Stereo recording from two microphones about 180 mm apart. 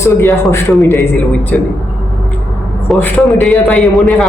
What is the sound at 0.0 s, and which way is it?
Speech, 15° left (ahead or behind).